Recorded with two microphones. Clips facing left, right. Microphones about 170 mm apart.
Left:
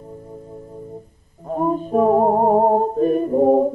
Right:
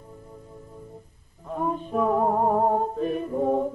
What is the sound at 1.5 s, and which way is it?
Music, 40° left (ahead or behind).